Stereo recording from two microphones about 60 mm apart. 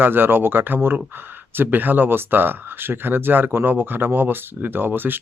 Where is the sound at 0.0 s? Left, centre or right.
Right.